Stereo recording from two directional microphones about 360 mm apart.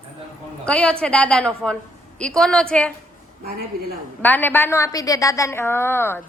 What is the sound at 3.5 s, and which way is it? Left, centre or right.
Speech, right.